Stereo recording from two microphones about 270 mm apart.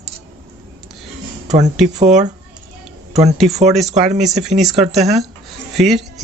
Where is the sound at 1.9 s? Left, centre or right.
Right.